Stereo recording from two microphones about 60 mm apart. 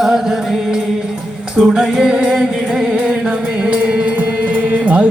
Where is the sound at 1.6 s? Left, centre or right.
Centre.